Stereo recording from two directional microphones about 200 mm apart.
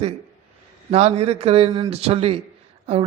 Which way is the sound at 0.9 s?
30° right (ahead or behind).